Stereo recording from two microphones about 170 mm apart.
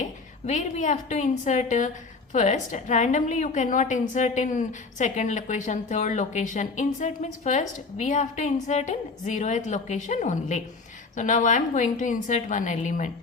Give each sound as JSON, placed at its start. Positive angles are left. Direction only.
{"t": 0.0, "sound": "a woman's voice", "side_deg": 45}